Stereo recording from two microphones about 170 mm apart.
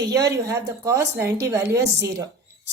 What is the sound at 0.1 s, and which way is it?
A woman's voice, 20° right (ahead or behind).